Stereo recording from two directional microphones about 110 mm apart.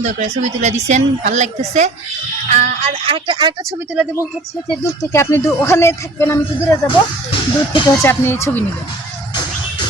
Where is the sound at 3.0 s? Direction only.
50° right (ahead or behind).